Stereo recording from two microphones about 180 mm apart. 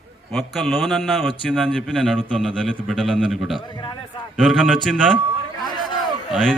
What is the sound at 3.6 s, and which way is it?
Speech, 25° left (ahead or behind).